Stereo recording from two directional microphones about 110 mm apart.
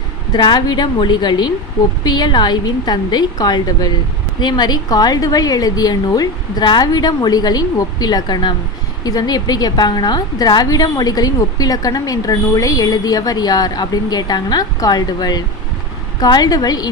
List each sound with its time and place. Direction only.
0.3 s a woman's voice: 45° left (ahead or behind)